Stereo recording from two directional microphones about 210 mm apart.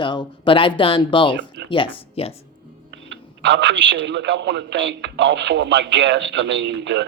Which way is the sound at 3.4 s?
55° right (ahead or behind).